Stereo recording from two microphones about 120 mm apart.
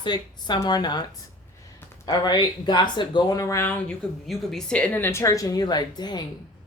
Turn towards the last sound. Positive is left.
turn(degrees=35)  # may be behind; listen again after turning